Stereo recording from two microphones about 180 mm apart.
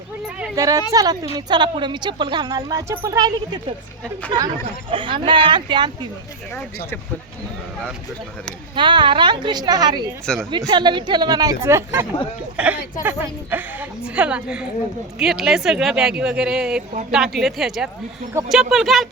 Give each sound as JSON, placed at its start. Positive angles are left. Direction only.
{"t": 0.5, "sound": "speech", "side_deg": -20}
{"t": 8.7, "sound": "speech", "side_deg": -25}
{"t": 10.3, "sound": "speech", "side_deg": 5}
{"t": 10.7, "sound": "a woman's voice", "side_deg": -25}